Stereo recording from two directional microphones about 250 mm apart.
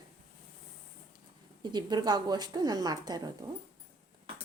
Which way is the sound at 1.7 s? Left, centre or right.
Centre.